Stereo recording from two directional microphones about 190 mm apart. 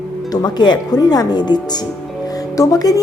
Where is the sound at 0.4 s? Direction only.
20° left (ahead or behind).